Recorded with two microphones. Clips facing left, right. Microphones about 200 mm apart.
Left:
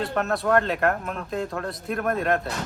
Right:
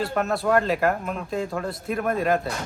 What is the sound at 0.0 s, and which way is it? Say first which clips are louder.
Speech: right 1 dB; centre (ahead or behind).